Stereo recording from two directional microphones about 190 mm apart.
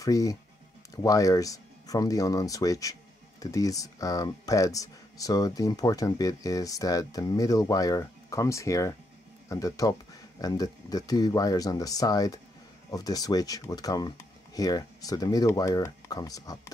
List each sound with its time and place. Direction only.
0.0 s speech: 15° left (ahead or behind)